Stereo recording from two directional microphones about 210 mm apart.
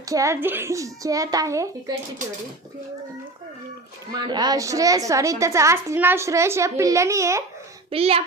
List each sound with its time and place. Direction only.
0.1 s a woman's voice: 15° right (ahead or behind)
4.3 s a woman's voice: 20° right (ahead or behind)
7.9 s a child's voice: 25° right (ahead or behind)